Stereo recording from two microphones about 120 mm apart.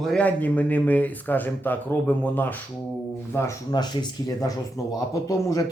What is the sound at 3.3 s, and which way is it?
Speech, 30° left (ahead or behind).